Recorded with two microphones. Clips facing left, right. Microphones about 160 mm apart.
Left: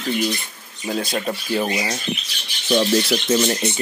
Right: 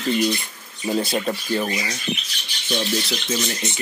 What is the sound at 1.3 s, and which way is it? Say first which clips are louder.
Speech: left 1 dB; 15° left (ahead or behind).